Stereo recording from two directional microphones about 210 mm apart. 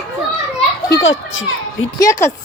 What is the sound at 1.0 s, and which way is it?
Speech, 65° left (ahead or behind).